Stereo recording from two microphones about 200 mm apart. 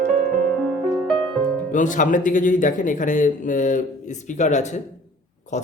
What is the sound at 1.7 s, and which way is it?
Speech, 40° left (ahead or behind).